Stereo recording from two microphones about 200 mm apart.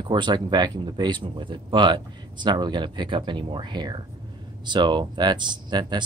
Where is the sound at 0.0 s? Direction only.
20° right (ahead or behind).